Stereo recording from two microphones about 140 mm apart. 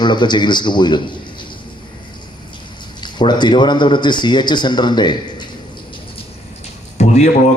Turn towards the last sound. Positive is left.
turn(degrees=55)  # may be behind; listen again after turning